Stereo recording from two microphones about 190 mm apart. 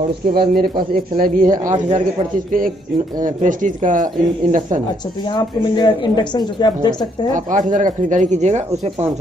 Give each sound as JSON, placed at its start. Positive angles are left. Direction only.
{"t": 0.3, "sound": "speech", "side_deg": -55}
{"t": 3.2, "sound": "speech", "side_deg": -45}
{"t": 5.3, "sound": "speech", "side_deg": 25}
{"t": 7.3, "sound": "speech", "side_deg": -40}